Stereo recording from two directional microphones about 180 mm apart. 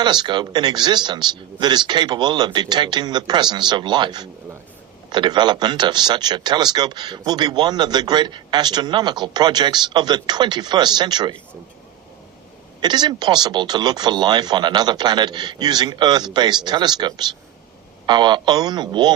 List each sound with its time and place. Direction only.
0.0 s a man's voice: 25° right (ahead or behind)
12.8 s a man's voice: 25° right (ahead or behind)